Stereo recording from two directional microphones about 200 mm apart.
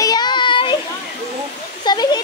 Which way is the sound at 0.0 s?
20° left (ahead or behind).